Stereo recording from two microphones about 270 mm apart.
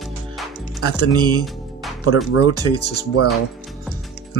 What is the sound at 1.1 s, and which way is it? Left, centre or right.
Music, centre.